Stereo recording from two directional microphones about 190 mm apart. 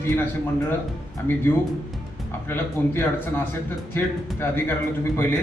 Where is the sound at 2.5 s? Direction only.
10° left (ahead or behind).